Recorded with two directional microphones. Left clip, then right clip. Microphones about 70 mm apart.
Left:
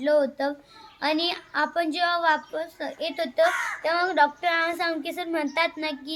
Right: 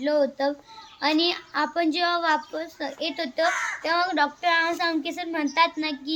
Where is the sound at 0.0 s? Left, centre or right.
Left.